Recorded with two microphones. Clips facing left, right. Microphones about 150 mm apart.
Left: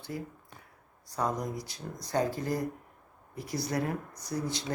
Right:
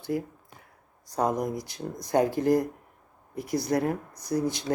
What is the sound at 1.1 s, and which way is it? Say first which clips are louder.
Speech: right 5 dB; 50° right (ahead or behind).